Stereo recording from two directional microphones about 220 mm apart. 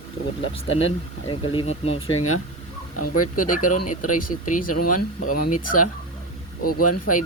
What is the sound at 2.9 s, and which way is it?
Speech, 90° left.